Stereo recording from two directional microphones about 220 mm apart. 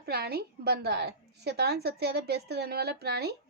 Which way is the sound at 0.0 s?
45° right (ahead or behind).